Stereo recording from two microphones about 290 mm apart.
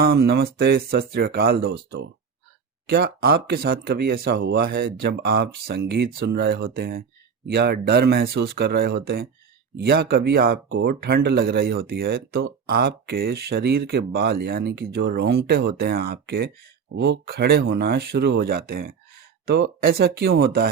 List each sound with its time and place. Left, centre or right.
0.0 s speech: right